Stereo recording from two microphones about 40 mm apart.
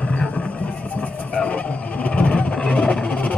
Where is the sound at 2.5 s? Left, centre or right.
Left.